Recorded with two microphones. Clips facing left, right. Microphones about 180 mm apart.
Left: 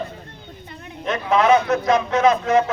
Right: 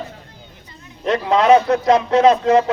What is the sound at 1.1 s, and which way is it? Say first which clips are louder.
A man's voice: right 3 dB; 35° right (ahead or behind).